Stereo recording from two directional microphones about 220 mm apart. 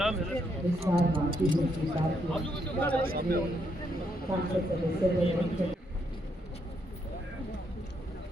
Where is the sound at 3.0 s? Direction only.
45° right (ahead or behind).